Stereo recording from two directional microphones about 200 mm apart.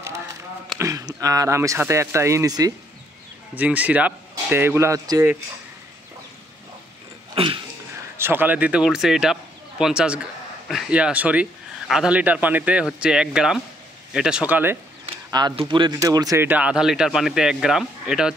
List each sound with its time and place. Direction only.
0.7 s speech: 15° right (ahead or behind)
7.3 s a sound: 25° right (ahead or behind)
8.2 s speech: 10° right (ahead or behind)
15.0 s speech: 25° right (ahead or behind); by 18.3 s 5° right (ahead or behind)